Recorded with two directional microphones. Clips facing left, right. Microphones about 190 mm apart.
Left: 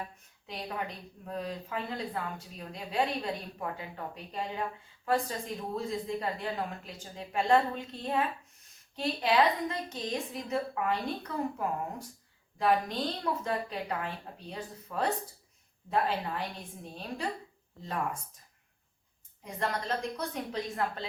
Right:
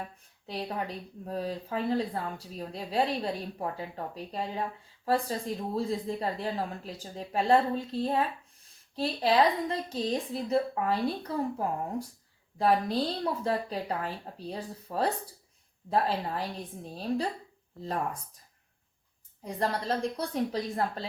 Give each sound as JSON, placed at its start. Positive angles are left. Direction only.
{"t": 0.4, "sound": "speech", "side_deg": -35}
{"t": 12.5, "sound": "speech", "side_deg": -35}
{"t": 19.5, "sound": "speech", "side_deg": -35}